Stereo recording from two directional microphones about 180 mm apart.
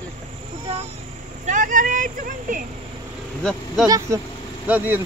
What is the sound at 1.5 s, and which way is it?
Speech, 45° right (ahead or behind).